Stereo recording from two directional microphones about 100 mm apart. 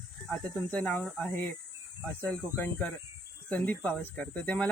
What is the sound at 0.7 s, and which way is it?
Speech, 15° left (ahead or behind).